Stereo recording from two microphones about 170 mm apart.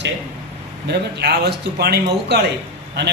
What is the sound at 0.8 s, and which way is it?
A man's voice, 75° right (ahead or behind).